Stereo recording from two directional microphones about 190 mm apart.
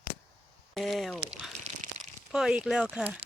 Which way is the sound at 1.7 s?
35° right (ahead or behind).